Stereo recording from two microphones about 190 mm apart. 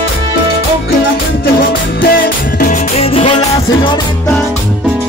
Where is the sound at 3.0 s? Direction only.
30° left (ahead or behind).